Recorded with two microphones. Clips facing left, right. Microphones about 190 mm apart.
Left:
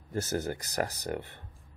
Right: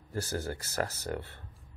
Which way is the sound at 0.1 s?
20° left (ahead or behind).